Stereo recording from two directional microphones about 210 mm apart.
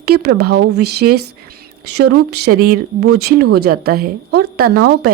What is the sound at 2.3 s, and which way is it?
Speech, 50° right (ahead or behind).